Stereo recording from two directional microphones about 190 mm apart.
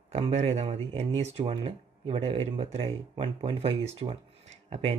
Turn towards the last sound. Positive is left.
turn(degrees=-30)  # may be behind; listen again after turning